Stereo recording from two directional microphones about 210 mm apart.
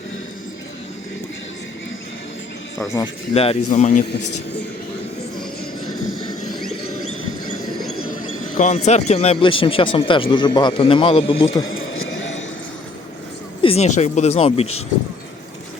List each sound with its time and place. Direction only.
2.7 s speech: 15° left (ahead or behind)
3.3 s speech: 30° left (ahead or behind)
7.9 s a sound: 80° left
8.5 s speech: 35° left (ahead or behind)
13.6 s speech: 30° left (ahead or behind)